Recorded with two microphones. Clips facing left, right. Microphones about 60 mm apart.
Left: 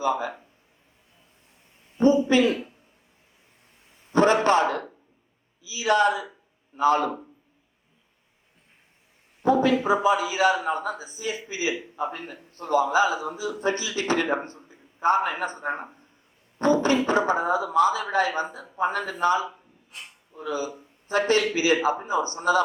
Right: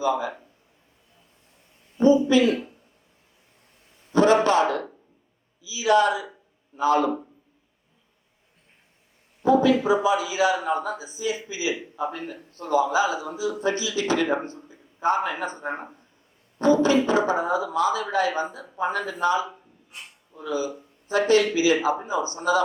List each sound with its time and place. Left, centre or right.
0.0 s a man's voice: left
2.0 s a man's voice: left
4.1 s a sound: left
5.6 s a man's voice: left
9.4 s a man's voice: left